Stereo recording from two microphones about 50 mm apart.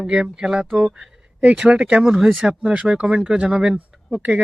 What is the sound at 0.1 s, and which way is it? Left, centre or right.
Speech, centre.